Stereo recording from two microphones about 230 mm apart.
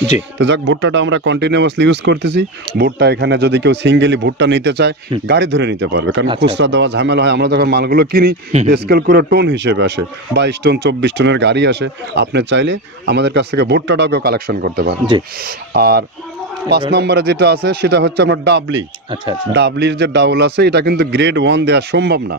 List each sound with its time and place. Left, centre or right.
0.4 s speech: right